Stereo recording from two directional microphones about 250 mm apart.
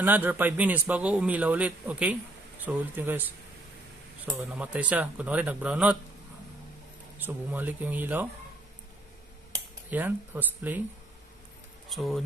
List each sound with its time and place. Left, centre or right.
0.0 s a man's voice: centre
4.4 s a man's voice: centre
7.2 s a man's voice: centre
9.5 s speech: centre
11.9 s a man's voice: centre